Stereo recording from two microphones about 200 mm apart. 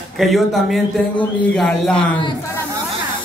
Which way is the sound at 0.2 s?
Centre (ahead or behind).